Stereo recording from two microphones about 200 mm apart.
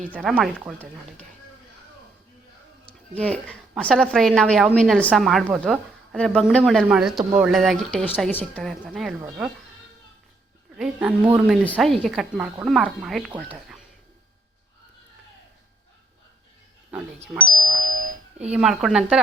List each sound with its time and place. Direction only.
0.1 s a woman's voice: 5° right (ahead or behind)
3.2 s a woman's voice: 5° left (ahead or behind)
10.8 s a woman's voice: 10° right (ahead or behind)
13.5 s music: 5° right (ahead or behind)
17.4 s doorbell: 90° right
18.5 s a woman's voice: 5° right (ahead or behind)